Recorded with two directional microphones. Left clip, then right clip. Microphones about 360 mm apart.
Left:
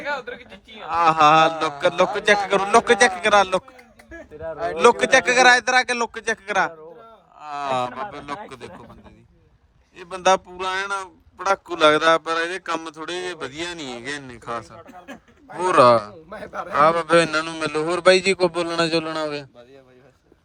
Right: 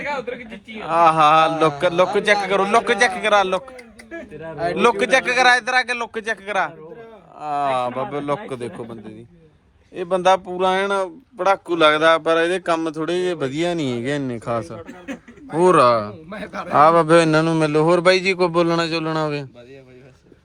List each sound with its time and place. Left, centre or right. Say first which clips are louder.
0.0 s a sound: right 2 dB; centre
0.9 s a man's voice: right 2 dB; centre
10.0 s a man's voice: right 3 dB; centre
14.6 s a man's voice: right 7 dB; centre
16.3 s a man's voice: left 2 dB; left
16.7 s a man's voice: right 4 dB; centre